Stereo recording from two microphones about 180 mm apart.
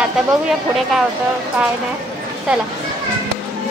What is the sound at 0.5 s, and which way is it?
Speech, centre (ahead or behind).